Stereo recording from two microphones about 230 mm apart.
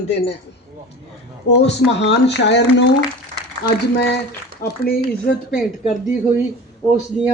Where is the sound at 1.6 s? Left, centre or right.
Left.